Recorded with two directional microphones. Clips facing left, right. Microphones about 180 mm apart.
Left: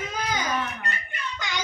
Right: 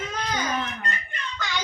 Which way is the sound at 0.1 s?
10° left (ahead or behind).